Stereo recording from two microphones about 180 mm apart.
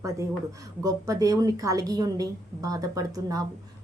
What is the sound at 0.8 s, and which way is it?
A woman's voice, 20° right (ahead or behind).